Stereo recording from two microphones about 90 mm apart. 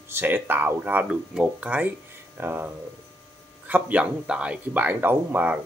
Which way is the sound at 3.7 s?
15° right (ahead or behind).